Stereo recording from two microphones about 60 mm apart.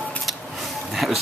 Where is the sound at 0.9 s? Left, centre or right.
Centre.